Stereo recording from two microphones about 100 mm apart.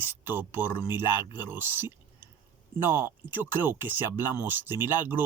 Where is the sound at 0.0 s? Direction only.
20° right (ahead or behind).